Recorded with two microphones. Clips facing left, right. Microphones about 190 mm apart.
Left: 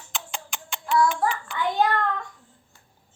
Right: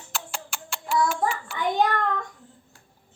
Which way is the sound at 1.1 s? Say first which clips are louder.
Left 1 dB; 5° right (ahead or behind).